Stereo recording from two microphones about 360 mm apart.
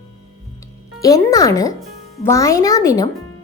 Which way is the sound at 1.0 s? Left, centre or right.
Centre.